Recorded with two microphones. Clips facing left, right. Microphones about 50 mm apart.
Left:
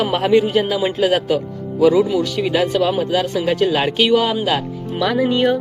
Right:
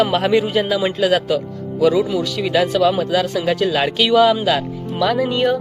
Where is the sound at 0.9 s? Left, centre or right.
Centre.